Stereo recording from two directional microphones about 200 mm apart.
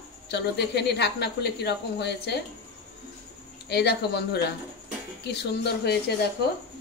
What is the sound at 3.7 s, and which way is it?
A woman's voice, 55° left (ahead or behind).